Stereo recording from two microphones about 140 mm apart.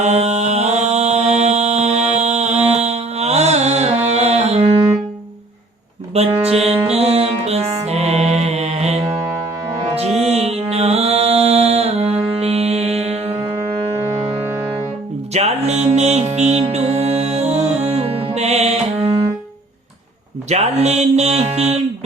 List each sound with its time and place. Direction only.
0.0 s music: 50° right (ahead or behind)
6.1 s music: 45° right (ahead or behind)
10.2 s music: 50° right (ahead or behind)
14.4 s music: 15° right (ahead or behind)
15.3 s music: 50° right (ahead or behind)
20.5 s music: 50° right (ahead or behind)